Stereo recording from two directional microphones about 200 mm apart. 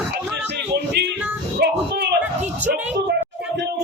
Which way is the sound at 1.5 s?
55° right (ahead or behind).